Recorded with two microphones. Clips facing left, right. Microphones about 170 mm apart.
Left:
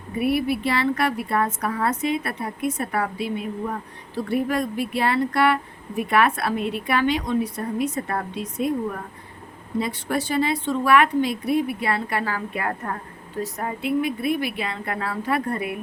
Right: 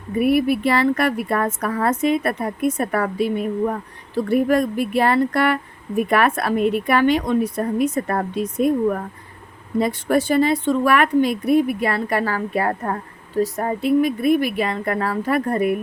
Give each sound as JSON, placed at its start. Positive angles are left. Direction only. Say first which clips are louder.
{"t": 0.2, "sound": "a woman's voice", "louder": "right 5 dB", "side_deg": -50}